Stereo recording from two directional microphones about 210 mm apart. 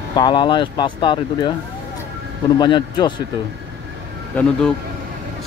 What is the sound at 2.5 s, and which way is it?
Speech, 20° left (ahead or behind).